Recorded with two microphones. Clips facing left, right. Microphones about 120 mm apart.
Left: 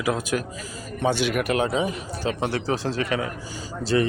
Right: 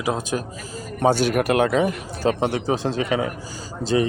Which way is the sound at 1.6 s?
60° right (ahead or behind).